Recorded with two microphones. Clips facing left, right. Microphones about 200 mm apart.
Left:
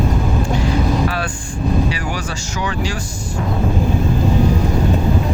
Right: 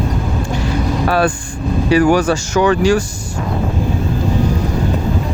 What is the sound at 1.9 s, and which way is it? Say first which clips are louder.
Speech: right 13 dB; 55° right (ahead or behind).